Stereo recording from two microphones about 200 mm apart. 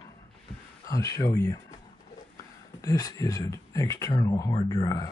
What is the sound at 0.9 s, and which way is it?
Speech, 15° left (ahead or behind).